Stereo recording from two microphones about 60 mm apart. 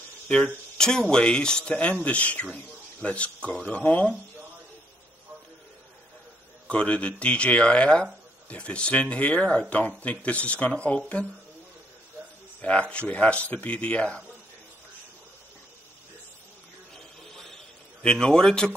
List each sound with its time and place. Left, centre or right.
0.7 s speech: centre
6.7 s speech: centre
12.9 s speech: left
16.9 s a sound: centre
18.0 s speech: centre